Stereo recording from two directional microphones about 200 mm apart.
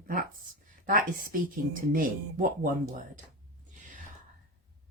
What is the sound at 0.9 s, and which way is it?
Speech, 45° right (ahead or behind).